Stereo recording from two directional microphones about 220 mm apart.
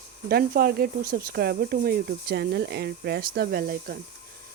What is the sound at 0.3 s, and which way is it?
Speech, 45° right (ahead or behind).